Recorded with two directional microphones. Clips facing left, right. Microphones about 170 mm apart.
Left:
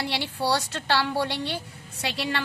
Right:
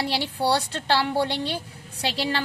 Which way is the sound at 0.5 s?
30° right (ahead or behind).